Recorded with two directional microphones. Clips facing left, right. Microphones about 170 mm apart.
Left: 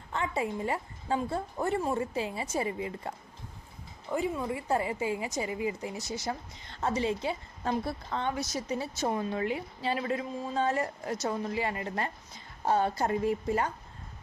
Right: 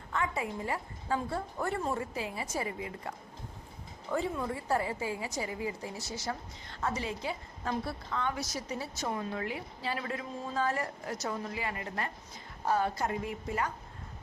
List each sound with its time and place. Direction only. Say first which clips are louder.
0.1 s a woman's voice: left 2 dB; 25° left (ahead or behind)
4.1 s a woman's voice: left 2 dB; 15° left (ahead or behind); by 13.7 s 35° left (ahead or behind)